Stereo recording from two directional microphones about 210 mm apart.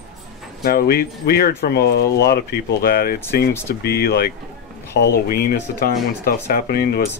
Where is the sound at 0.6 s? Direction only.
45° left (ahead or behind).